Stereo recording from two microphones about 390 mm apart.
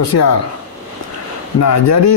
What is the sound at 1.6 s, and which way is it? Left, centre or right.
Speech, left.